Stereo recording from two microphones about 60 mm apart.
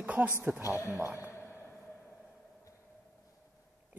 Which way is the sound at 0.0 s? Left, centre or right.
Right.